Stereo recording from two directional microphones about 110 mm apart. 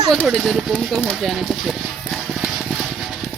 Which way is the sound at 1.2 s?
Centre (ahead or behind).